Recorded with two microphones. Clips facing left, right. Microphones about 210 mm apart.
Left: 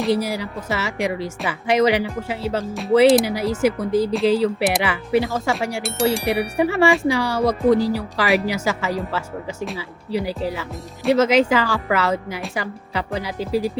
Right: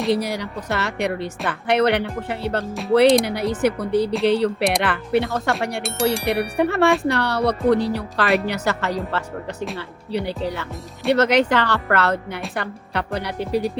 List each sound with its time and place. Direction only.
0.0 s speech: 5° left (ahead or behind)